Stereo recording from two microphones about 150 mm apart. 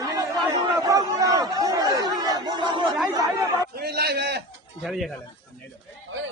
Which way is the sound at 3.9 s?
90° right.